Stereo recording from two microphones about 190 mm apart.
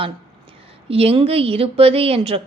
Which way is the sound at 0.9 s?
30° right (ahead or behind).